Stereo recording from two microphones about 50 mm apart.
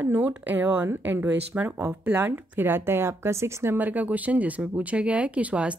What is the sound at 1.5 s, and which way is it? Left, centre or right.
Speech, right.